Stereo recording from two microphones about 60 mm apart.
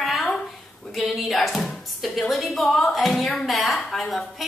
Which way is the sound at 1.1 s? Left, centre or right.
Centre.